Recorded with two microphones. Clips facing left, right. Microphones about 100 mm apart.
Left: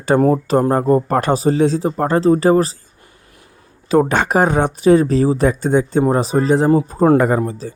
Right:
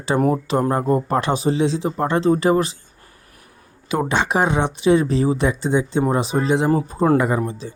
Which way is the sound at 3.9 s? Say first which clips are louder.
Left 6 dB; 45° left (ahead or behind).